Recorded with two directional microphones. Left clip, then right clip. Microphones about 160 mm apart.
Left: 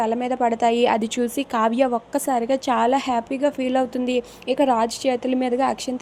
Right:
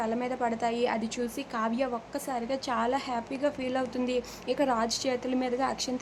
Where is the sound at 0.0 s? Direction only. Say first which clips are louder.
Left 9 dB; 35° left (ahead or behind).